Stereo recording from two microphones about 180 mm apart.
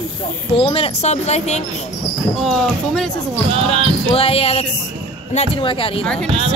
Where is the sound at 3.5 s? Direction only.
30° right (ahead or behind).